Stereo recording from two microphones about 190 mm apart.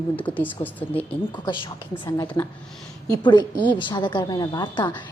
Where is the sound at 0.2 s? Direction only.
10° left (ahead or behind).